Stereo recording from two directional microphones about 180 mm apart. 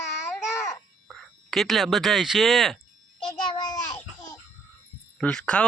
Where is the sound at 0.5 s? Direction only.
15° left (ahead or behind).